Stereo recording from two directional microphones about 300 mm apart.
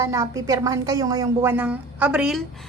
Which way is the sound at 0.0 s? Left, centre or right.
Centre.